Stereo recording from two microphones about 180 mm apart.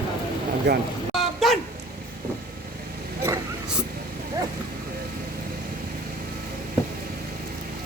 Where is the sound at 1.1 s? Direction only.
Centre (ahead or behind).